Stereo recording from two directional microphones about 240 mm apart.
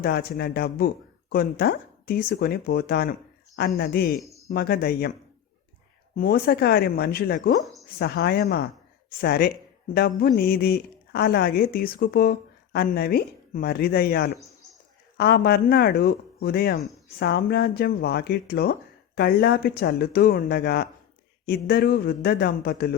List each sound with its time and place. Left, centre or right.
0.0 s a woman's voice: left
4.2 s a sound: centre
4.4 s a woman's voice: left
6.1 s a woman's voice: left
7.6 s a sound: centre
7.9 s a woman's voice: left